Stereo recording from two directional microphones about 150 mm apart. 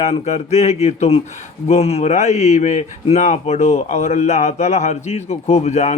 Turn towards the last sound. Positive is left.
turn(degrees=45)  # may be behind; listen again after turning